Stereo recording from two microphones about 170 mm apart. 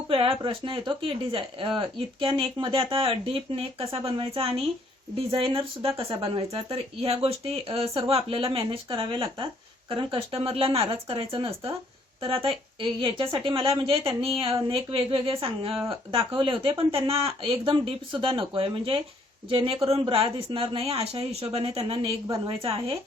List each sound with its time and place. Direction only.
0.1 s a woman's voice: 30° right (ahead or behind)
22.3 s a woman's voice: 20° right (ahead or behind)